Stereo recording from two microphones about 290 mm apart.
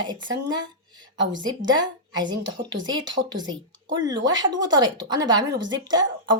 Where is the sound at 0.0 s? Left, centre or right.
Centre.